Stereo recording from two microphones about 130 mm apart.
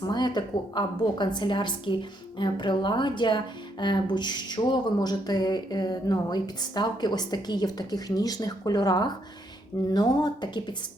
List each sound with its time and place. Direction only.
0.0 s a woman's voice: 35° left (ahead or behind)